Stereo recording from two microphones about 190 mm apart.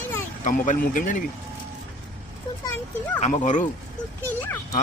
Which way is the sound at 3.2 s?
40° left (ahead or behind).